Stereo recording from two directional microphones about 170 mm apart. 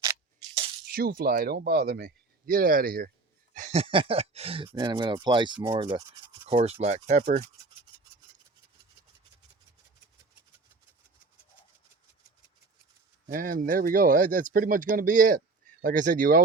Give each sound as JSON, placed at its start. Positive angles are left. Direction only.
{"t": 0.9, "sound": "speech", "side_deg": -65}
{"t": 3.5, "sound": "speech", "side_deg": -45}
{"t": 5.6, "sound": "rub", "side_deg": -25}
{"t": 6.8, "sound": "speech", "side_deg": -40}
{"t": 13.2, "sound": "speech", "side_deg": -55}